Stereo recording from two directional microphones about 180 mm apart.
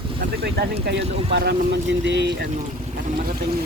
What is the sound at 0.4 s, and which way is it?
Speech, 65° right (ahead or behind).